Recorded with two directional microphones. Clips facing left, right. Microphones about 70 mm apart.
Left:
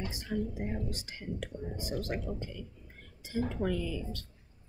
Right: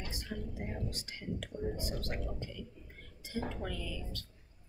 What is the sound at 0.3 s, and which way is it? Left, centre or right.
Speech, left.